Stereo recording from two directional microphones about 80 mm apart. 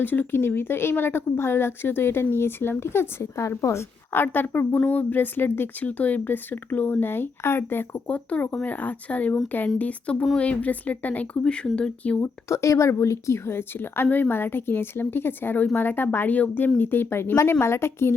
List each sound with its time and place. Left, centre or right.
0.0 s a woman's voice: left
12.2 s speech: left